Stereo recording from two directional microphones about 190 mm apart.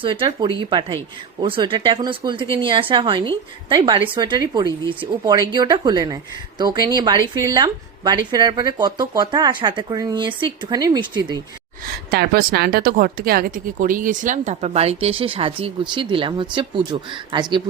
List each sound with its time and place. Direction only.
0.0 s speech: 25° right (ahead or behind)
12.1 s speech: 55° right (ahead or behind); by 17.4 s 25° right (ahead or behind)